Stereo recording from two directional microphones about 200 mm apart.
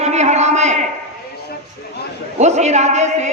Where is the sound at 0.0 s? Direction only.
35° right (ahead or behind).